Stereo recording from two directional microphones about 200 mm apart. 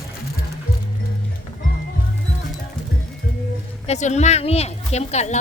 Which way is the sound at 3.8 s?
35° left (ahead or behind).